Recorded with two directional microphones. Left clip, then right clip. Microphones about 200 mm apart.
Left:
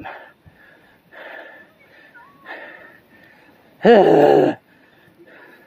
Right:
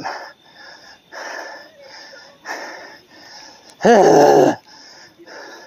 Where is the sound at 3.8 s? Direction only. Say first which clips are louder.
Right 1 dB; 30° right (ahead or behind).